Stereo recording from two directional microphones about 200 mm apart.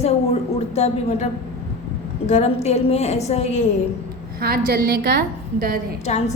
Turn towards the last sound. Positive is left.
turn(degrees=35)  # may be behind; listen again after turning